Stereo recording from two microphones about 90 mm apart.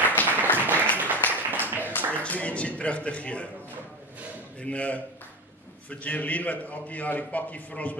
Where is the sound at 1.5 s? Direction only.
20° right (ahead or behind).